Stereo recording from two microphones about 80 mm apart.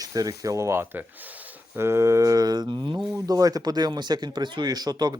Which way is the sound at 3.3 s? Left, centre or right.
Right.